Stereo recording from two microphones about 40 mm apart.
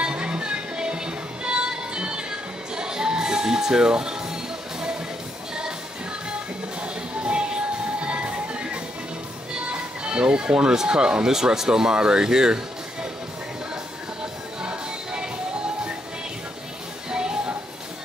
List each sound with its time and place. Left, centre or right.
0.0 s music: right
8.0 s music: right
9.7 s speech: right
14.6 s music: right
17.1 s music: right